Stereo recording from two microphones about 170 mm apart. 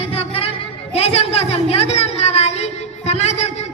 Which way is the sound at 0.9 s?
35° left (ahead or behind).